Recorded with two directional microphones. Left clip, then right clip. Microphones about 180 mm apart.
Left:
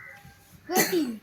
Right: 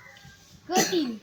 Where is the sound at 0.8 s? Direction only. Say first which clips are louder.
Left 1 dB; 35° right (ahead or behind).